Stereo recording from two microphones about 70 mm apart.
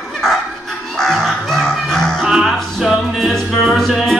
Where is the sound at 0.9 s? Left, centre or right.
Centre.